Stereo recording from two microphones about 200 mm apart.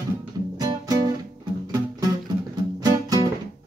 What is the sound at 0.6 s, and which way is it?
Music, 20° right (ahead or behind).